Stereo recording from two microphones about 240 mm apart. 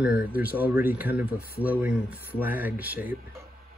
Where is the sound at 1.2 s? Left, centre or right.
Left.